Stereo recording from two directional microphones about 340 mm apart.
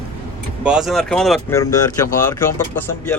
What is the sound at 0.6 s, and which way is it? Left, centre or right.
Speech, centre.